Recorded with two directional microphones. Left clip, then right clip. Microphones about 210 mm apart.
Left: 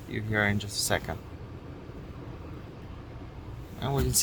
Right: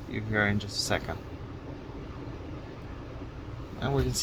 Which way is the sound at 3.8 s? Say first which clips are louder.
Right 1 dB; 10° left (ahead or behind).